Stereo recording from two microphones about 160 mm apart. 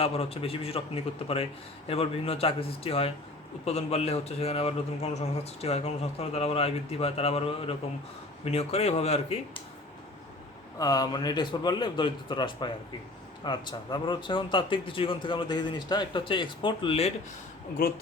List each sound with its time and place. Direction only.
0.0 s speech: 40° left (ahead or behind)
10.8 s a man's voice: 25° left (ahead or behind)
17.8 s speech: 65° left (ahead or behind)